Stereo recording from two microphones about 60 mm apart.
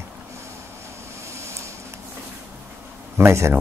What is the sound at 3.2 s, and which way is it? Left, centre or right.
Speech, right.